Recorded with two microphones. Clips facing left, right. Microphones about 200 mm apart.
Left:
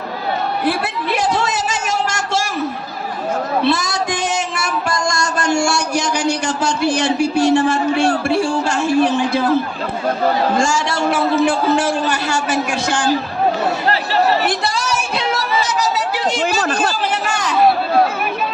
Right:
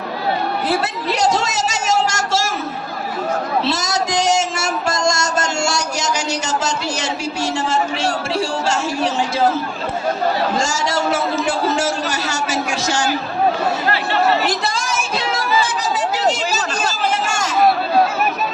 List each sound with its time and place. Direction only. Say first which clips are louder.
1.5 s a sound: right 2 dB; 45° right (ahead or behind)
3.8 s music: right 1 dB; 45° right (ahead or behind)
8.7 s a man's voice: left 5 dB; 60° left (ahead or behind)
10.6 s a man's voice: left 4 dB; 40° right (ahead or behind)
10.8 s a man's voice: left 2 dB; 60° left (ahead or behind)
13.9 s speech: left 1 dB; 40° left (ahead or behind)
14.4 s a sound: left 1 dB; 45° right (ahead or behind)
15.6 s chatter: left 2 dB; 50° right (ahead or behind)
17.2 s chatter: left 1 dB; 45° right (ahead or behind)